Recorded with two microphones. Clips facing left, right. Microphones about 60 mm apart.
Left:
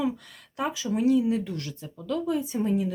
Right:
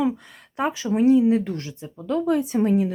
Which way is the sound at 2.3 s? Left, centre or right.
Right.